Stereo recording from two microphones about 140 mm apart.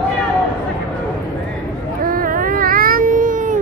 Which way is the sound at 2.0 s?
90° right.